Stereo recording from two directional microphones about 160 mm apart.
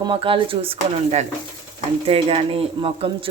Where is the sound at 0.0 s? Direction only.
35° right (ahead or behind).